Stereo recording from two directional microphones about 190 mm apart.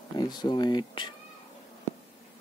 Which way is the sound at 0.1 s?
20° left (ahead or behind).